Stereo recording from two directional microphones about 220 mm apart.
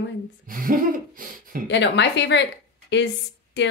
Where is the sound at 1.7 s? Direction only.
55° left (ahead or behind).